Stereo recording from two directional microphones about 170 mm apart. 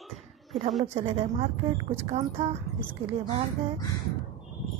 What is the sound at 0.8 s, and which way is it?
A woman's voice, 35° right (ahead or behind).